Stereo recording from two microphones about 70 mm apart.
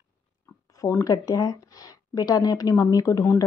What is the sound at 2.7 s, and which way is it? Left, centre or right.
Speech, left.